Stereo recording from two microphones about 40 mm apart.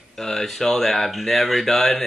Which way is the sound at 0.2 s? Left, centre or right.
Centre.